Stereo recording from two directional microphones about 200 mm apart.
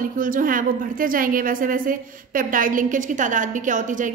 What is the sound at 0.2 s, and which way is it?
A woman's voice, 45° right (ahead or behind).